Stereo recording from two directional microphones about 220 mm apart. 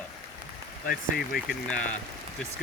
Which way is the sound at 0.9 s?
45° left (ahead or behind).